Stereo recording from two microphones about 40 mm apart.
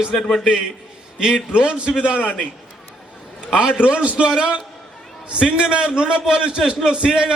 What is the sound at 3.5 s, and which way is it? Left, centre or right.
A man's voice, right.